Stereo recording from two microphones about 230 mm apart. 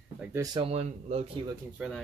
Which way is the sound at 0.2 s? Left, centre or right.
Centre.